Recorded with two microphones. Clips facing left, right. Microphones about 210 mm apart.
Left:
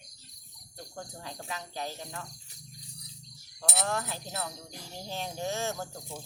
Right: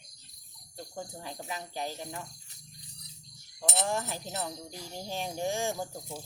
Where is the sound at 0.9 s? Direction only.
10° right (ahead or behind).